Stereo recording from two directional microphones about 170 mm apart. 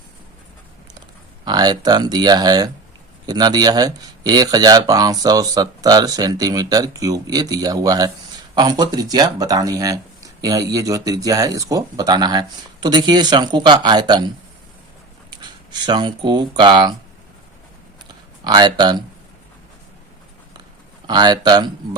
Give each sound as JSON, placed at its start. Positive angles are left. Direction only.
{"t": 1.5, "sound": "speech", "side_deg": -25}
{"t": 15.4, "sound": "speech", "side_deg": -25}
{"t": 18.4, "sound": "speech", "side_deg": -25}
{"t": 21.1, "sound": "speech", "side_deg": -25}